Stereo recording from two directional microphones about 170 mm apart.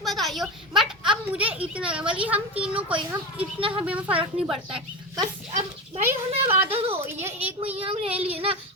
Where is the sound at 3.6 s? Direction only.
30° right (ahead or behind).